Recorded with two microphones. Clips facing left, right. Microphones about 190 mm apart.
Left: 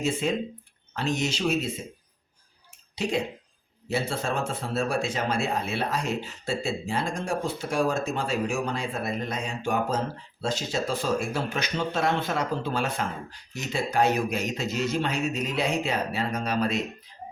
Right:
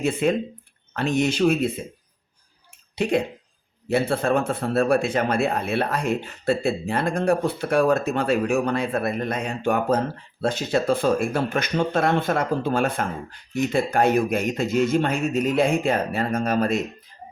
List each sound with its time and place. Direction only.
0.0 s speech: 60° right (ahead or behind)
2.9 s speech: 55° right (ahead or behind)